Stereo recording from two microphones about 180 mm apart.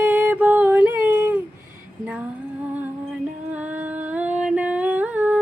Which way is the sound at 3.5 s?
10° right (ahead or behind).